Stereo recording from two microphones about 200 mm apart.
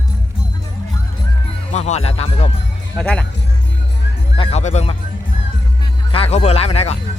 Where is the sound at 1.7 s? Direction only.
35° left (ahead or behind).